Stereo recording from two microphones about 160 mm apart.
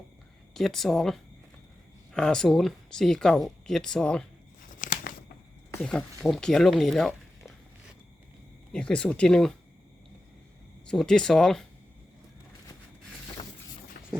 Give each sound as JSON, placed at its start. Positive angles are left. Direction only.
{"t": 0.5, "sound": "speech", "side_deg": 0}
{"t": 4.8, "sound": "a sound", "side_deg": 55}
{"t": 5.8, "sound": "speech", "side_deg": 5}
{"t": 8.7, "sound": "speech", "side_deg": 5}
{"t": 10.8, "sound": "speech", "side_deg": 5}
{"t": 14.0, "sound": "run", "side_deg": 65}